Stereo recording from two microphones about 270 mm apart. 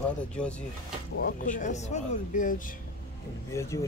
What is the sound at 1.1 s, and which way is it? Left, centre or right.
Speech, left.